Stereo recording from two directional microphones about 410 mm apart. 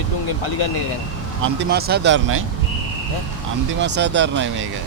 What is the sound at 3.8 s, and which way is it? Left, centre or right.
Speech, right.